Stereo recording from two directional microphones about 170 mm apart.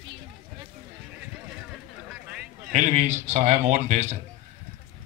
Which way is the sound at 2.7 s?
45° right (ahead or behind).